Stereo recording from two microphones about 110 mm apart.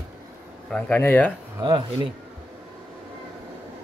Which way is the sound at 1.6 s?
45° right (ahead or behind).